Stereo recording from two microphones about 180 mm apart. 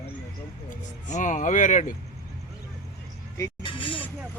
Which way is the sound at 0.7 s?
45° left (ahead or behind).